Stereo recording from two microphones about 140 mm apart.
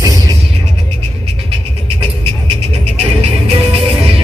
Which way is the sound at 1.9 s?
40° right (ahead or behind).